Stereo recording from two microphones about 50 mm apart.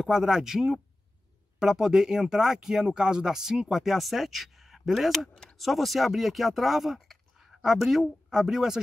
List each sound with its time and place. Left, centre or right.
0.0 s speech: centre
5.3 s a sound: centre
5.6 s speech: centre